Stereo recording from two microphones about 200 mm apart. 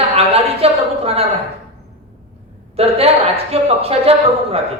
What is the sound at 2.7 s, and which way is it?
Speech, 30° right (ahead or behind).